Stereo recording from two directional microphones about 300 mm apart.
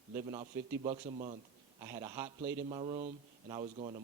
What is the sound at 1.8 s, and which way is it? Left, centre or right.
Speech, centre.